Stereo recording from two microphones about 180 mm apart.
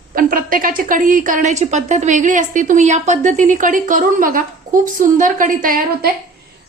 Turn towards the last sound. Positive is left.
turn(degrees=-50)  # may be behind; listen again after turning